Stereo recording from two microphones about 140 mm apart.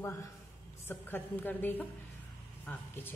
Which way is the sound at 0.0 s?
20° left (ahead or behind).